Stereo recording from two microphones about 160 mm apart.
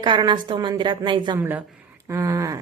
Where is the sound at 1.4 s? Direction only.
10° right (ahead or behind).